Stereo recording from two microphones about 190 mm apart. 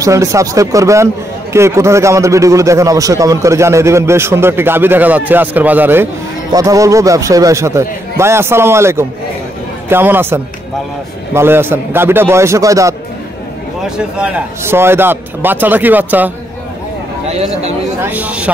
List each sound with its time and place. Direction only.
0.0 s a man's voice: 15° right (ahead or behind)
13.8 s a man's voice: 5° right (ahead or behind)
17.3 s speech: 35° right (ahead or behind)
18.0 s a man's voice: 10° right (ahead or behind)